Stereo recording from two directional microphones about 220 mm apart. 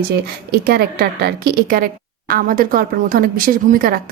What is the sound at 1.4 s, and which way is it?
A woman's voice, 40° right (ahead or behind).